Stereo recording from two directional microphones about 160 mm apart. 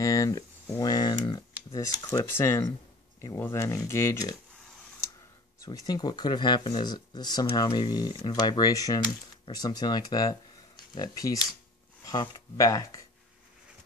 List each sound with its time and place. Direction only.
0.0 s a sound: 20° left (ahead or behind)
1.2 s speech: 25° left (ahead or behind)
5.6 s speech: 20° left (ahead or behind)